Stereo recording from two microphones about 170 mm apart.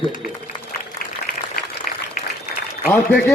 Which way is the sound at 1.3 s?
60° left (ahead or behind).